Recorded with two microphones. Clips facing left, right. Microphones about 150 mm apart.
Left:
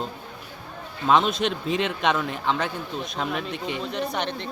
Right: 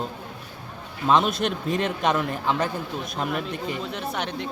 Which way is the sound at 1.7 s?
45° right (ahead or behind).